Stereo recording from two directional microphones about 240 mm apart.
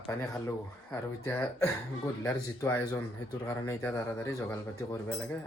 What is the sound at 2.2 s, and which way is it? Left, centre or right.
Speech, centre.